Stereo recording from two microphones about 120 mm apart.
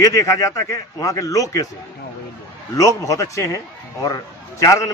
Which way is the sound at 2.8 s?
25° left (ahead or behind).